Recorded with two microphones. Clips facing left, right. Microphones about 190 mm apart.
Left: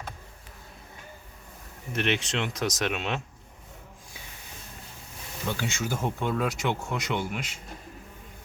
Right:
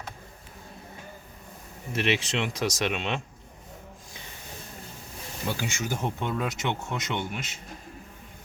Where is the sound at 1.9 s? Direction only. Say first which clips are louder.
Right 1 dB; centre (ahead or behind).